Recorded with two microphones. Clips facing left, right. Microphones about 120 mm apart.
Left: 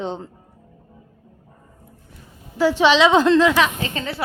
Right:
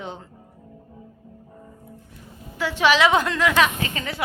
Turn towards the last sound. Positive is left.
turn(degrees=30)  # may be behind; listen again after turning